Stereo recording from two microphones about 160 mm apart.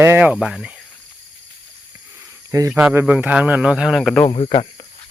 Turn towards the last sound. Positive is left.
turn(degrees=30)  # may be behind; listen again after turning